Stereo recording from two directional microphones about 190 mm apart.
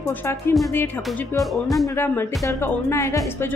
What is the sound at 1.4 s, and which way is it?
Speech, centre (ahead or behind).